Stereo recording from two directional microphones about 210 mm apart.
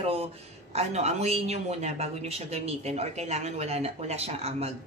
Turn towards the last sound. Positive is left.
turn(degrees=-30)  # may be behind; listen again after turning